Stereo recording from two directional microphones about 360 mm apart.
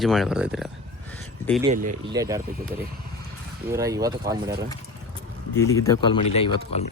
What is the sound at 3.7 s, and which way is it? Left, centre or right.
Speech, centre.